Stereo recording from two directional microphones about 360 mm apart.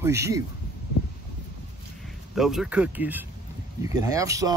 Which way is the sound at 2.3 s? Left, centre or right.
Centre.